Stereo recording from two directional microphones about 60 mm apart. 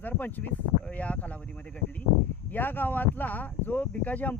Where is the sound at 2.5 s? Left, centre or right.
Left.